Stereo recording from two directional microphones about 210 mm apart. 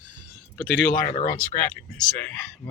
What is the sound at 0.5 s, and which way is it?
Speech, 5° left (ahead or behind).